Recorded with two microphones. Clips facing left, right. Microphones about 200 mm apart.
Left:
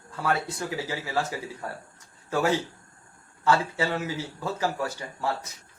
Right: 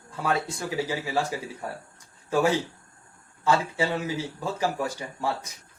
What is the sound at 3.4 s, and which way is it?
A man's voice, 15° right (ahead or behind).